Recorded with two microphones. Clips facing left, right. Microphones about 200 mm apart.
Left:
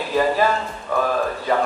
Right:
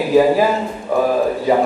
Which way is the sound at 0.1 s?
10° right (ahead or behind).